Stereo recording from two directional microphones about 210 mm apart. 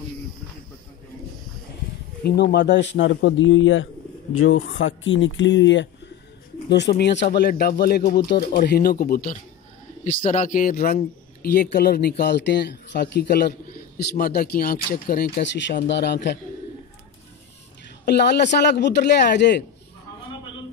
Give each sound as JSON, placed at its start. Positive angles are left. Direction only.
{"t": 2.2, "sound": "speech", "side_deg": 50}
{"t": 18.0, "sound": "speech", "side_deg": 50}